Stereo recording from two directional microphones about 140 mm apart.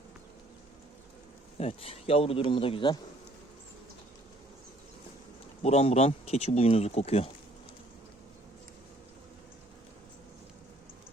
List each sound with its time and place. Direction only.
1.5 s speech: 45° left (ahead or behind)
5.6 s speech: 50° left (ahead or behind)